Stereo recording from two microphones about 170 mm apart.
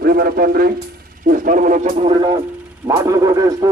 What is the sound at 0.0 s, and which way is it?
A man's voice, 65° right (ahead or behind).